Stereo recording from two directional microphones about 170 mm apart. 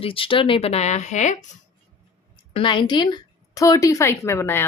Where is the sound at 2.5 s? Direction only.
30° left (ahead or behind).